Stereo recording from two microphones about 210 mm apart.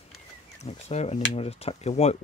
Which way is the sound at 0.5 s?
30° left (ahead or behind).